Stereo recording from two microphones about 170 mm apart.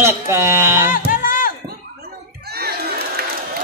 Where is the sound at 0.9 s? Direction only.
55° left (ahead or behind).